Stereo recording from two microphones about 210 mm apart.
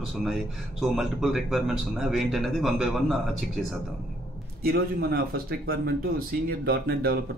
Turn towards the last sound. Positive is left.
turn(degrees=-45)  # may be behind; listen again after turning